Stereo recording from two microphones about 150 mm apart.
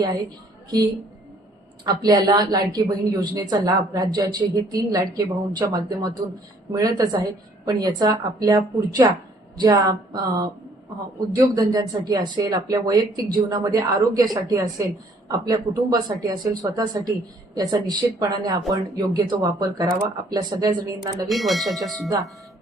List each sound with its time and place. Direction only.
1.8 s speech: 25° right (ahead or behind)
21.2 s speech: centre (ahead or behind)